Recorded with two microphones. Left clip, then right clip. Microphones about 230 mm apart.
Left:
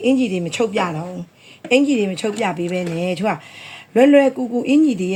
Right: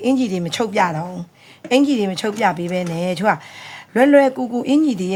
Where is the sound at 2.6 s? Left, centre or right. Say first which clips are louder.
Even; right.